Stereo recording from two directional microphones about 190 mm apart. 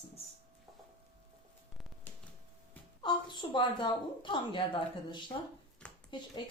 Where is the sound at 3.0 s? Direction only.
25° left (ahead or behind).